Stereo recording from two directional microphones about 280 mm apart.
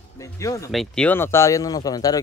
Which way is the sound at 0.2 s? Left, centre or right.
Centre.